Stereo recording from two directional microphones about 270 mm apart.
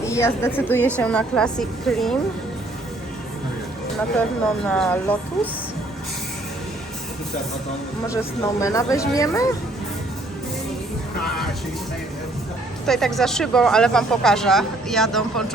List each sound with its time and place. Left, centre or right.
0.1 s speech: centre
4.6 s speech: centre
8.0 s speech: centre
12.8 s speech: centre